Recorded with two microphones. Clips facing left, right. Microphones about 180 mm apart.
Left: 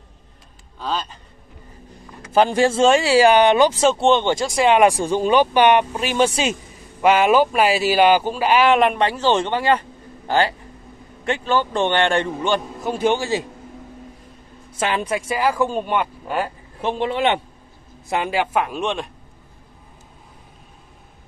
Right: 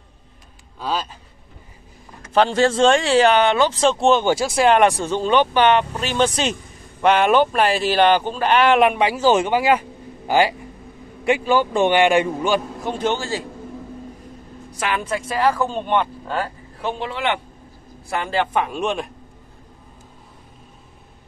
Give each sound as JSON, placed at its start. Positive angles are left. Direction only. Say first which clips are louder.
{"t": 0.7, "sound": "a man's voice", "louder": "right 1 dB", "side_deg": -5}
{"t": 2.3, "sound": "speech", "louder": "even", "side_deg": 10}
{"t": 4.7, "sound": "a man's voice", "louder": "left 1 dB", "side_deg": 10}
{"t": 14.7, "sound": "a woman's voice", "louder": "left 2 dB", "side_deg": 25}
{"t": 15.1, "sound": "speech", "louder": "right 1 dB", "side_deg": 10}
{"t": 18.1, "sound": "speech", "louder": "left 1 dB", "side_deg": 15}